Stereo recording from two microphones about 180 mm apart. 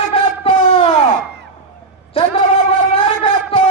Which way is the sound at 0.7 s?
30° left (ahead or behind).